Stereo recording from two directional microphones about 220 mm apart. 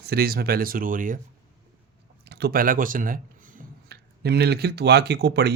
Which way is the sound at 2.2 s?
50° right (ahead or behind).